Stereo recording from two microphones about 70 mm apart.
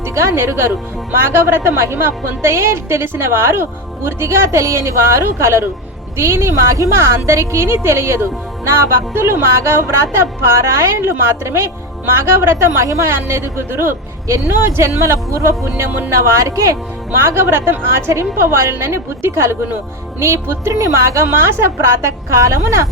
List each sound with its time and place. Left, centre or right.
0.0 s a woman's voice: right
17.1 s a woman's voice: right